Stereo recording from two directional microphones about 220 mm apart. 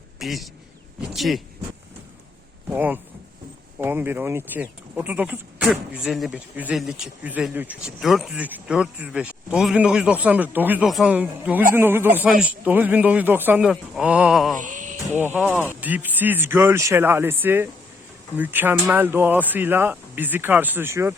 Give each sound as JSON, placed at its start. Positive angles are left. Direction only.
{"t": 0.2, "sound": "a man's voice", "side_deg": 0}
{"t": 2.6, "sound": "speech", "side_deg": -10}
{"t": 14.6, "sound": "a sound", "side_deg": -35}
{"t": 15.2, "sound": "speech", "side_deg": -10}